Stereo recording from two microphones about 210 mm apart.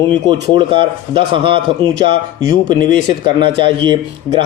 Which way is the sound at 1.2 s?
25° right (ahead or behind).